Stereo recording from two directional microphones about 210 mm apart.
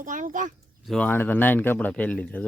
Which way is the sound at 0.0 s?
40° right (ahead or behind).